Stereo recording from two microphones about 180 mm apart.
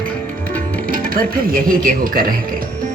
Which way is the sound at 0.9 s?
55° right (ahead or behind).